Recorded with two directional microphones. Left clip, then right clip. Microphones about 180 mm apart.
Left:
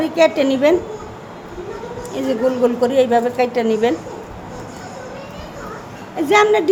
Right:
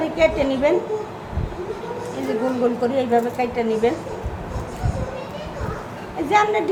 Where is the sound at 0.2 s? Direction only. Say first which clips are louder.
Left 4 dB; 70° left (ahead or behind).